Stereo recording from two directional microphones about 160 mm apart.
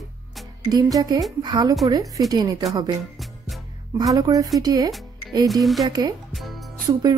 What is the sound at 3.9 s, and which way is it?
A woman's voice, 25° right (ahead or behind).